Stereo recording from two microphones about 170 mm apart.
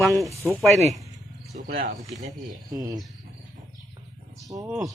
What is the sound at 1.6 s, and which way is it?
Speech, 55° right (ahead or behind).